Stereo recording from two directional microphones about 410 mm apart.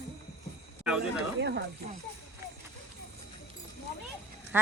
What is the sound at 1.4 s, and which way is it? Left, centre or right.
Speech, right.